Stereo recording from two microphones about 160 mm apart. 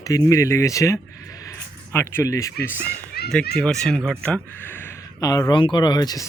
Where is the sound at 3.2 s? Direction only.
80° left.